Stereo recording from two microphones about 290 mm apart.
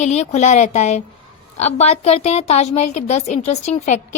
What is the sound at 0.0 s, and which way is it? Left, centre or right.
A woman's voice, left.